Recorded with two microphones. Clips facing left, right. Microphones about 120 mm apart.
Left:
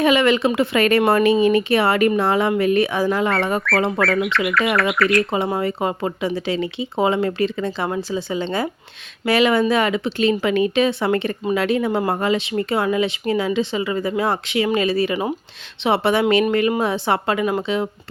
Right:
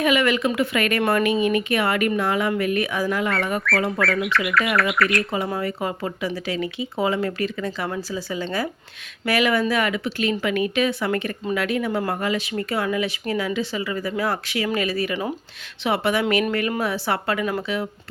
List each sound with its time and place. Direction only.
0.0 s speech: 30° left (ahead or behind)
4.0 s speech: centre (ahead or behind)
5.3 s speech: 25° left (ahead or behind)